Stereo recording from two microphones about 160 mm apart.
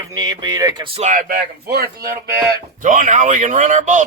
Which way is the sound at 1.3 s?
75° right (ahead or behind).